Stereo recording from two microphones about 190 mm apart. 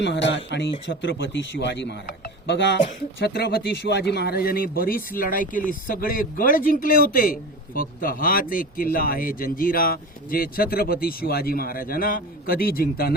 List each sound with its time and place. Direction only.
0.0 s speech: 70° left (ahead or behind)
3.2 s speech: 60° left (ahead or behind)